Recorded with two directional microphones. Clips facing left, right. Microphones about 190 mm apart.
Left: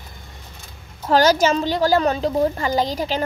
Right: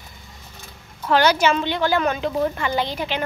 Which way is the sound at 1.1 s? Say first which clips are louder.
Left 2 dB; 40° left (ahead or behind).